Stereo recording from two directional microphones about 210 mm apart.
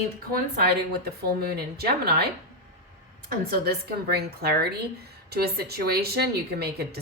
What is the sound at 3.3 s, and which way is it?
A woman's voice, 45° right (ahead or behind).